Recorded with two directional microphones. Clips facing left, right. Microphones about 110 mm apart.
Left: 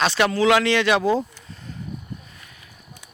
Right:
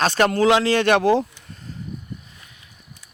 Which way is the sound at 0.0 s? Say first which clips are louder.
Right 2 dB; 45° right (ahead or behind).